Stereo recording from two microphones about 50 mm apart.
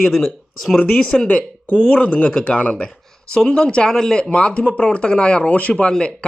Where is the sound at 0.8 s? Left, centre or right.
Left.